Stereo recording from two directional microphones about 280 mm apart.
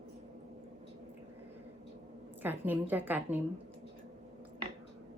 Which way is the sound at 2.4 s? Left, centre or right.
Centre.